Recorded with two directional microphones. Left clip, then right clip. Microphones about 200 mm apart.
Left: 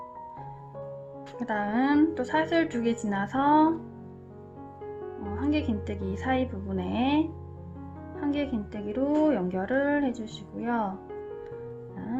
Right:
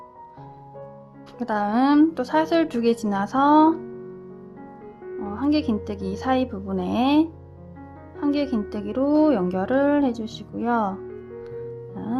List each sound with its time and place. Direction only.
1.4 s a woman's voice: 35° right (ahead or behind)
5.4 s a woman's voice: 35° right (ahead or behind)